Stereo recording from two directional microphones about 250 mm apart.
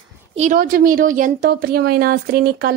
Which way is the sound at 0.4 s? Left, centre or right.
Right.